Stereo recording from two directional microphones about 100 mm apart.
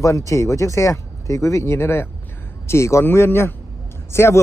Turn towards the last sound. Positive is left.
turn(degrees=25)  # may be behind; listen again after turning